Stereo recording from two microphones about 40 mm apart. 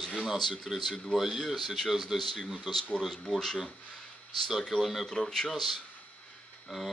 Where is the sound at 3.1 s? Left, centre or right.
Centre.